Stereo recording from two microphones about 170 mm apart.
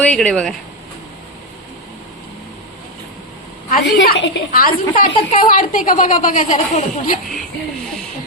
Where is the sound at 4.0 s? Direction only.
90° left; by 6.5 s 50° left (ahead or behind).